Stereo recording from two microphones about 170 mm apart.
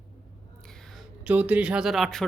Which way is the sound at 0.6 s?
5° left (ahead or behind).